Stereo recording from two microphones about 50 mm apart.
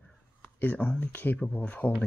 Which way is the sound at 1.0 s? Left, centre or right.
Left.